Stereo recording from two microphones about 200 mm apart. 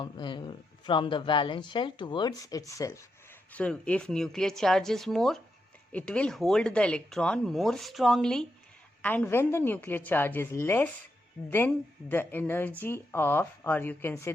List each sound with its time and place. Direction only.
0.0 s speech: 25° left (ahead or behind)